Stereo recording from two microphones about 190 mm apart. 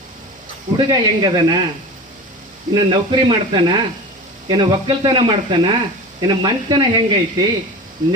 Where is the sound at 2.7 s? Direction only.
25° right (ahead or behind).